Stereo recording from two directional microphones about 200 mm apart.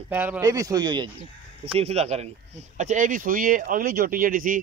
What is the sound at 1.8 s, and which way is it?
Speech, 30° right (ahead or behind).